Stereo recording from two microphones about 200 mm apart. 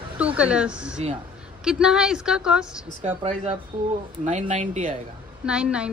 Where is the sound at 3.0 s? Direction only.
30° right (ahead or behind).